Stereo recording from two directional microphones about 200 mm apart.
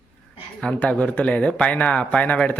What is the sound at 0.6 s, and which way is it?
Speech, 5° left (ahead or behind).